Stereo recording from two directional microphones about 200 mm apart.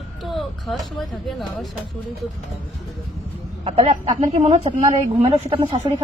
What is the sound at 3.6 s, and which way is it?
A woman's voice, 30° right (ahead or behind).